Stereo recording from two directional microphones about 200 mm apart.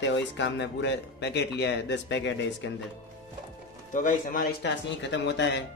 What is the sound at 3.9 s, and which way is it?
Speech, 40° left (ahead or behind).